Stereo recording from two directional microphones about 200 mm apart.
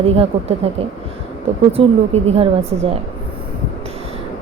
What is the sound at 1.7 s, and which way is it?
A woman's voice, 30° right (ahead or behind).